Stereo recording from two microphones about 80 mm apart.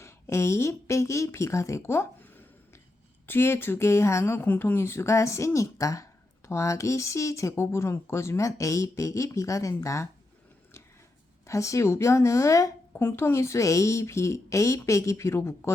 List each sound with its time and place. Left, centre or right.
0.0 s speech: left
3.2 s speech: left
11.4 s speech: left
12.9 s speech: left